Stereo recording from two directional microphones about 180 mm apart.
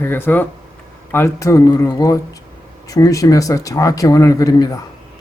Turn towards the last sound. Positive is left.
turn(degrees=20)  # may be behind; listen again after turning